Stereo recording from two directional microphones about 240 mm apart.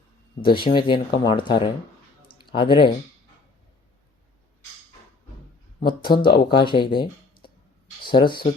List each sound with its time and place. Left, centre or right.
0.4 s speech: centre
5.8 s speech: centre